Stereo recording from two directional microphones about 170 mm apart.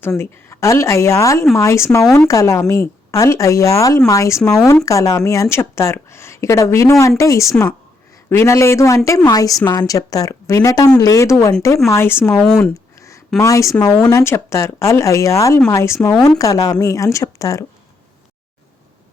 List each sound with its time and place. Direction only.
0.2 s a woman's voice: 15° left (ahead or behind)
12.3 s speech: 5° left (ahead or behind)
13.0 s a sound: 15° left (ahead or behind)
13.4 s a woman's voice: 20° left (ahead or behind)